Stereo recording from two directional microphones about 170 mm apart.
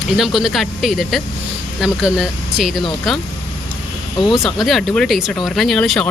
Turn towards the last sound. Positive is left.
turn(degrees=5)  # may be behind; listen again after turning